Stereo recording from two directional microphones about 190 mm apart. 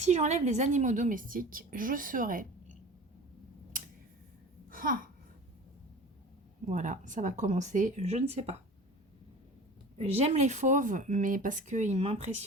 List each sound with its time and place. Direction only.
0.0 s a woman's voice: 35° right (ahead or behind)
3.7 s a sound: 45° right (ahead or behind)
6.7 s speech: 40° right (ahead or behind)
10.0 s speech: 35° right (ahead or behind)